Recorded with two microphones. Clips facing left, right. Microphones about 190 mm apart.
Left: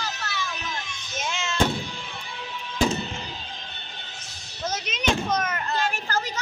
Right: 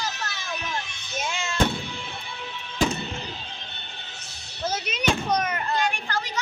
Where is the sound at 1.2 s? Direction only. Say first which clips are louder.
Right 1 dB; 10° right (ahead or behind).